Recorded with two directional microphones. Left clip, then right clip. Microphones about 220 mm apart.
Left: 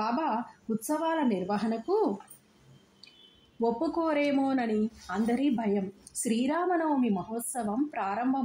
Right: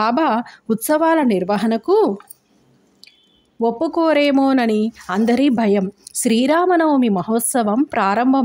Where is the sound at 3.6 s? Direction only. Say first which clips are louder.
Right 11 dB; 40° right (ahead or behind).